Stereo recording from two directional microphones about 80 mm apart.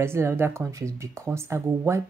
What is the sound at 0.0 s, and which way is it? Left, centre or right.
Speech, right.